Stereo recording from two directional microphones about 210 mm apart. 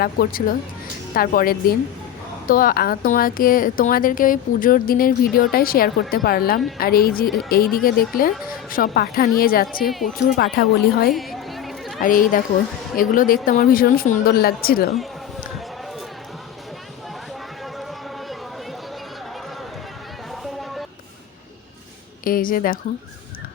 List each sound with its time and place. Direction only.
0.0 s speech: 45° left (ahead or behind)
11.1 s chatter: centre (ahead or behind)
12.0 s speech: 40° left (ahead or behind)
20.4 s a sound: centre (ahead or behind)
22.2 s speech: 40° left (ahead or behind)